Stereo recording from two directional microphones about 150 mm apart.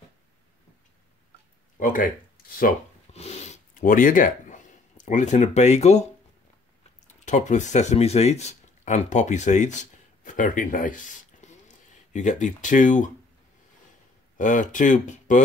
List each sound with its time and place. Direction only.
1.8 s speech: 65° left (ahead or behind)
3.1 s a sound: 45° left (ahead or behind)
7.2 s speech: 55° left (ahead or behind)
14.3 s speech: 60° left (ahead or behind)